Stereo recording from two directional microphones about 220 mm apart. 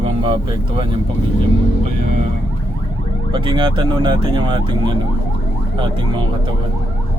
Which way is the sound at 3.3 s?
20° right (ahead or behind).